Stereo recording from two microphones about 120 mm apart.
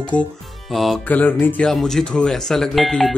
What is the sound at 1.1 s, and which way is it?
Music, 15° left (ahead or behind).